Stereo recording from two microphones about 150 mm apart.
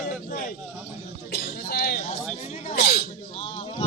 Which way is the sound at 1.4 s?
90° left.